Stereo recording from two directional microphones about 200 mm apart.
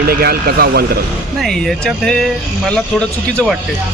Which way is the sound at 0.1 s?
50° right (ahead or behind).